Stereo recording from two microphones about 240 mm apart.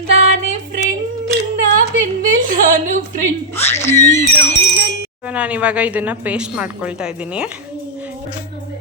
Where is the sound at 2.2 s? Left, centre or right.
Right.